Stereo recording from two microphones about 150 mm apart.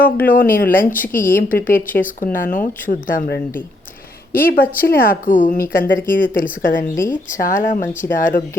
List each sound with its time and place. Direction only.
0.0 s speech: 70° left (ahead or behind)
4.8 s speech: 75° left (ahead or behind)